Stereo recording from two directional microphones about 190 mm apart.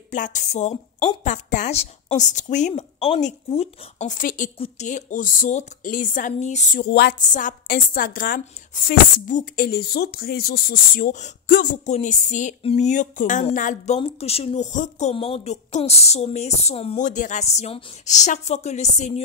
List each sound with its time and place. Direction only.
0.1 s a woman's voice: 40° left (ahead or behind)
6.8 s a sound: 55° left (ahead or behind)
7.2 s a woman's voice: 45° left (ahead or behind)